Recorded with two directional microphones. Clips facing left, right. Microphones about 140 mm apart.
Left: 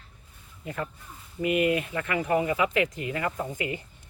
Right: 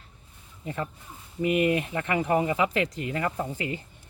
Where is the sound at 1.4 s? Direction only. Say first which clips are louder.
Right 1 dB; 55° left (ahead or behind).